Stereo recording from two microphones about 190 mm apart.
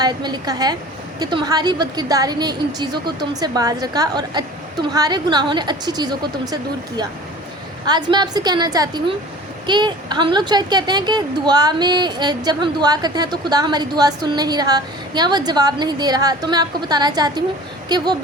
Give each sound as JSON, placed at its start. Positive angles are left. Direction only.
{"t": 0.0, "sound": "a woman's voice", "side_deg": -20}